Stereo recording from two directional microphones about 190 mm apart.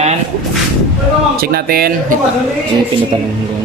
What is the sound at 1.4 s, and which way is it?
Speech, 55° right (ahead or behind).